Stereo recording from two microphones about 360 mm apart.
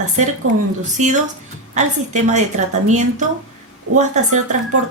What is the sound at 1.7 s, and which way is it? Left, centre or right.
Speech, centre.